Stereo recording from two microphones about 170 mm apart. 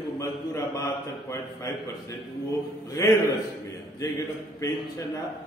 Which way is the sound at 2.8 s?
20° left (ahead or behind).